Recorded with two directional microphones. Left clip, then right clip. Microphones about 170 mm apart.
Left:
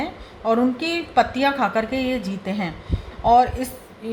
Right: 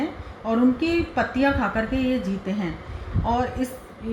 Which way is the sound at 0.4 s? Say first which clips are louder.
Left 2 dB; 50° left (ahead or behind).